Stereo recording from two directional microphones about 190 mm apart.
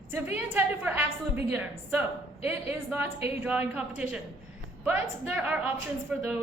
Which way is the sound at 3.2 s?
10° right (ahead or behind).